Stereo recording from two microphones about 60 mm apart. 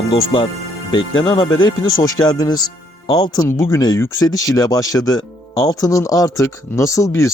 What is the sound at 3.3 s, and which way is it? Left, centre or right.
Speech, left.